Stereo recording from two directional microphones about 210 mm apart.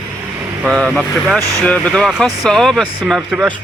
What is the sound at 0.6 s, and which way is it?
Speech, centre (ahead or behind).